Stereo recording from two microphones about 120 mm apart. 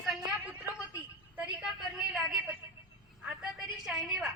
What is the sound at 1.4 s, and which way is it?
A woman's voice, 5° right (ahead or behind).